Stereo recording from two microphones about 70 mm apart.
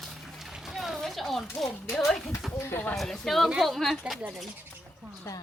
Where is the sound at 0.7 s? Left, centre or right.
Centre.